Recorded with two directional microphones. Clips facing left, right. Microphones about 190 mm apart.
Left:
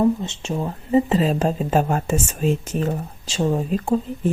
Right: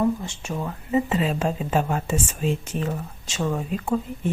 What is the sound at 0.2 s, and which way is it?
A woman's voice, 25° left (ahead or behind).